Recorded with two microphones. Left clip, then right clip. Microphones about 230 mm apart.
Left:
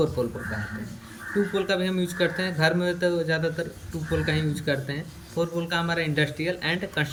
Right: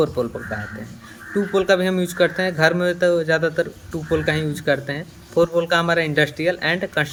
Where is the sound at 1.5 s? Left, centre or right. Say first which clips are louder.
Right 12 dB; centre.